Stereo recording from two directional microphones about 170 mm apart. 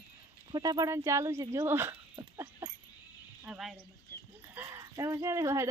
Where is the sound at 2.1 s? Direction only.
20° right (ahead or behind).